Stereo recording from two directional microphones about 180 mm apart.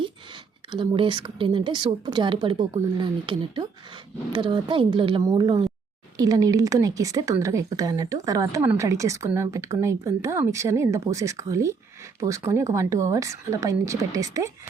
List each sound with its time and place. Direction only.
0.7 s a woman's voice: 25° right (ahead or behind)